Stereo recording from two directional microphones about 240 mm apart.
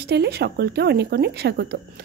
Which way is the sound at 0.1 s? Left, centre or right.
Right.